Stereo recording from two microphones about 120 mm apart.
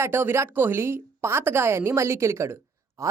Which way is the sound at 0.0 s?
20° right (ahead or behind).